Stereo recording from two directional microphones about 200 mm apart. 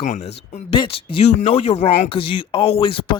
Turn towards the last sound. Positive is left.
turn(degrees=25)  # may be behind; listen again after turning